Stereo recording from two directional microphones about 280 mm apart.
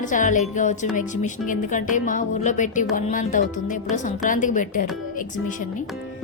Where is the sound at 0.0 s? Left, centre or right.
Left.